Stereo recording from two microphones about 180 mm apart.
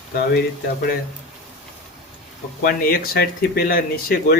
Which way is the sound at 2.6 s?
55° left (ahead or behind).